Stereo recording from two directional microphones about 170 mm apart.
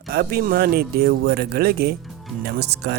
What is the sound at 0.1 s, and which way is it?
Speech, 65° right (ahead or behind).